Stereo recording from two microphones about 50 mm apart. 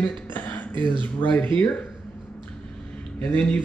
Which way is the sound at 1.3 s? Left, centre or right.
Left.